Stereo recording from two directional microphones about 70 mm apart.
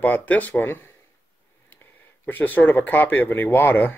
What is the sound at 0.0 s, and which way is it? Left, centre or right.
Speech, left.